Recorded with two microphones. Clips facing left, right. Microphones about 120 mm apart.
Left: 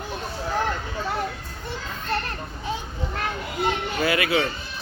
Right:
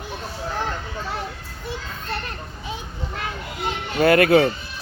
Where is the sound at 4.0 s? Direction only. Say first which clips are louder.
Right 9 dB; 55° right (ahead or behind).